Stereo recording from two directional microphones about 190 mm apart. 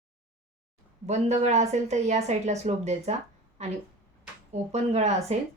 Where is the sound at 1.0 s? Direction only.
35° right (ahead or behind).